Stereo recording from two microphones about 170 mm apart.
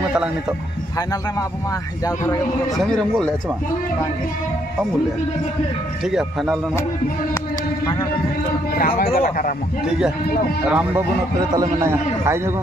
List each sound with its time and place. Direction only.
2.0 s speech: 20° left (ahead or behind)
6.0 s speech: 5° right (ahead or behind)
8.7 s speech: 60° left (ahead or behind)
10.7 s a man's voice: 10° right (ahead or behind)